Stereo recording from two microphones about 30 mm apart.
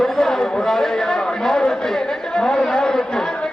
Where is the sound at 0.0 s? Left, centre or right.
Centre.